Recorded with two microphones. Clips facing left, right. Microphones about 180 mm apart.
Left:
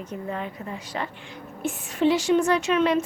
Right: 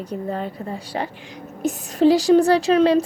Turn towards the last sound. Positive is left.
turn(degrees=-35)  # may be behind; listen again after turning